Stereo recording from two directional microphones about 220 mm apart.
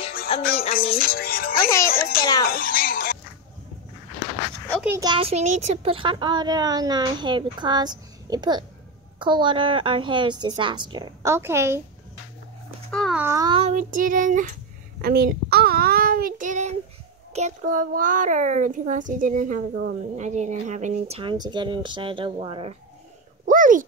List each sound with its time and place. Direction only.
0.4 s speech: 40° left (ahead or behind)
0.7 s music: 40° left (ahead or behind)
1.9 s speech: 40° left (ahead or behind)
4.8 s speech: 15° right (ahead or behind)
12.9 s a sound: centre (ahead or behind)
13.2 s child singing: 10° right (ahead or behind)
13.5 s child singing: 30° right (ahead or behind)
17.3 s a child's voice: 30° right (ahead or behind)
23.4 s a sound: 35° right (ahead or behind)